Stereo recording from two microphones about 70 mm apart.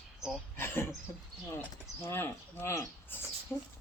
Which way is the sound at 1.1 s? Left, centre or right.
Left.